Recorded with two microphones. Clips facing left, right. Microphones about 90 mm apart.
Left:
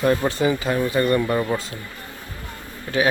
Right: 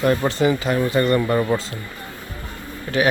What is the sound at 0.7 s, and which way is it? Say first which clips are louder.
Speech: right 1 dB; 20° right (ahead or behind).